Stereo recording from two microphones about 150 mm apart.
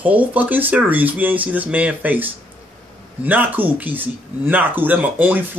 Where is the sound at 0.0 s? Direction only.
10° right (ahead or behind).